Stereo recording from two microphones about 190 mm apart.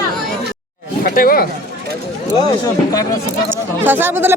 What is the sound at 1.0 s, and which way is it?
Speech, 50° left (ahead or behind).